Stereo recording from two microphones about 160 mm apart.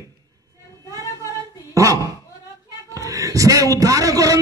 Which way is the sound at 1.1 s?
20° right (ahead or behind).